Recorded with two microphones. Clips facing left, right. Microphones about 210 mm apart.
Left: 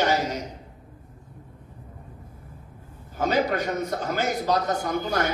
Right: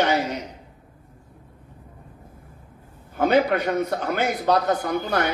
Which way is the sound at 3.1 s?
70° right (ahead or behind).